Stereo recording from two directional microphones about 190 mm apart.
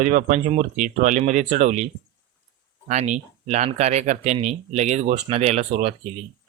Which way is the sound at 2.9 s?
40° right (ahead or behind).